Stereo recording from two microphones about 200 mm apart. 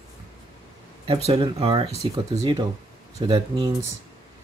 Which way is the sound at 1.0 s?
25° right (ahead or behind).